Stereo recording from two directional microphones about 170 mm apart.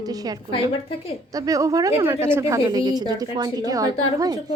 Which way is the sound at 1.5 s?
20° right (ahead or behind).